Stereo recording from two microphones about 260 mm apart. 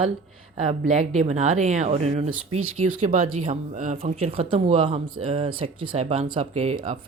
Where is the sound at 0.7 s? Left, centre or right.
Right.